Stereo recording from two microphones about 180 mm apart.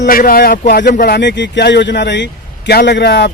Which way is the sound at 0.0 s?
55° left (ahead or behind).